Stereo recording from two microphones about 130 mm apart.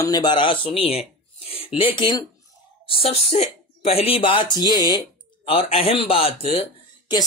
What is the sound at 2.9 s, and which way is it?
Speech, 50° left (ahead or behind).